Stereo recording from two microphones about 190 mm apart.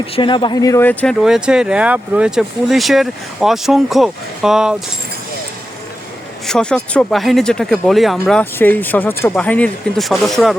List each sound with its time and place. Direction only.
0.0 s speech: 25° left (ahead or behind); by 1.1 s 10° left (ahead or behind)
1.2 s speech: 5° right (ahead or behind)
6.5 s speech: 5° left (ahead or behind)